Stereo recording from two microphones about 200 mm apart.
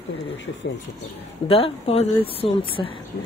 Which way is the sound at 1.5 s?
30° left (ahead or behind).